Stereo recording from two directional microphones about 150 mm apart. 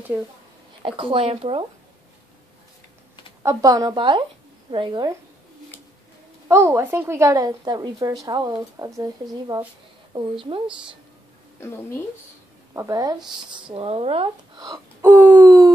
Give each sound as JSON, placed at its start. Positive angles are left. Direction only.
{"t": 0.8, "sound": "speech", "side_deg": -35}
{"t": 3.4, "sound": "speech", "side_deg": -25}
{"t": 6.5, "sound": "a woman's voice", "side_deg": -20}
{"t": 11.6, "sound": "a woman's voice", "side_deg": 15}
{"t": 12.7, "sound": "a woman's voice", "side_deg": -25}
{"t": 13.7, "sound": "speech", "side_deg": -40}
{"t": 15.0, "sound": "a sound", "side_deg": -15}